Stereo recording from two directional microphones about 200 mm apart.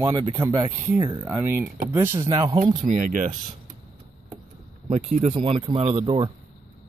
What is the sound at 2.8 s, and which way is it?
Speech, 40° right (ahead or behind).